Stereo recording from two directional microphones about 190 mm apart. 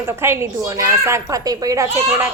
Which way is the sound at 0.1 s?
15° right (ahead or behind).